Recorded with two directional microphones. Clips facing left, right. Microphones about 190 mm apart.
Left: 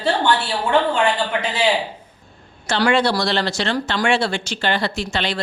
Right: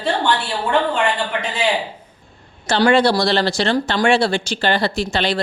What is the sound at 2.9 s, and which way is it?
Speech, 35° right (ahead or behind).